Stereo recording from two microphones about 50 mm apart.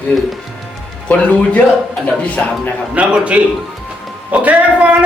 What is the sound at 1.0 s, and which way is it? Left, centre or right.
Speech, left.